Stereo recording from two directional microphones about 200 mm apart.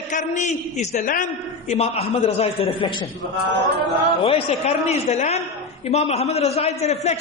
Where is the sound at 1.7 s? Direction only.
30° left (ahead or behind).